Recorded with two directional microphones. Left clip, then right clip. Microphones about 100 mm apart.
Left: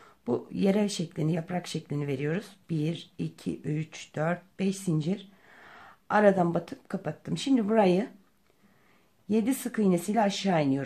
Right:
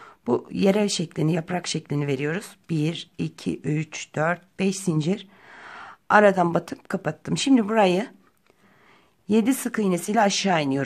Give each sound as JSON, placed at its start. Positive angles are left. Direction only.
{"t": 0.0, "sound": "speech", "side_deg": -35}
{"t": 9.3, "sound": "speech", "side_deg": -35}